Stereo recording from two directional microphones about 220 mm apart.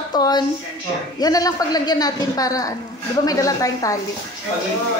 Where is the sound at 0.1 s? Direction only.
20° left (ahead or behind).